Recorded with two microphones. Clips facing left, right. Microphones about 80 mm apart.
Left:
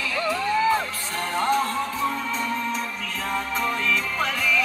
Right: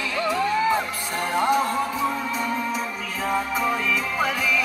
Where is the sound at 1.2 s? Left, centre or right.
Centre.